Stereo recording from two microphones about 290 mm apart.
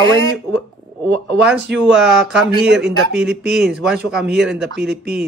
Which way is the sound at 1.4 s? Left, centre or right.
Centre.